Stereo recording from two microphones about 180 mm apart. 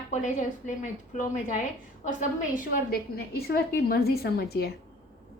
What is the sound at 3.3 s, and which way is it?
A woman's voice, 60° left (ahead or behind).